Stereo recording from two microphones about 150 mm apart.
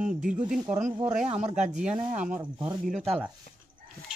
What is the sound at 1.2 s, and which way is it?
Speech, 45° right (ahead or behind).